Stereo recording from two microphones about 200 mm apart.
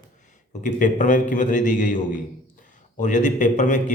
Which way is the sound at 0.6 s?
40° left (ahead or behind).